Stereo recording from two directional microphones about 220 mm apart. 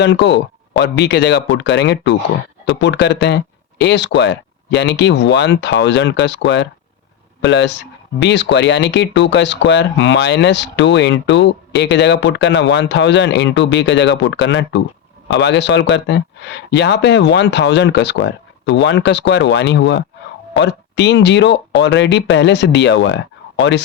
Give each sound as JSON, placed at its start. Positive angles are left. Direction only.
{"t": 0.0, "sound": "speech", "side_deg": 50}